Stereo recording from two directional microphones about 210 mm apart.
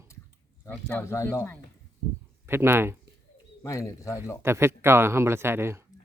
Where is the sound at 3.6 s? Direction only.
15° left (ahead or behind).